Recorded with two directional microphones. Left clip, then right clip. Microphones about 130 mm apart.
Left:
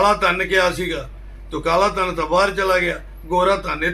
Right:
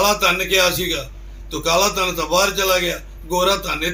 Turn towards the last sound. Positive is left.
turn(degrees=-5)  # may be behind; listen again after turning